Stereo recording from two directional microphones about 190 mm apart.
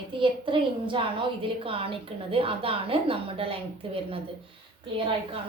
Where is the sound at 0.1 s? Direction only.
25° right (ahead or behind).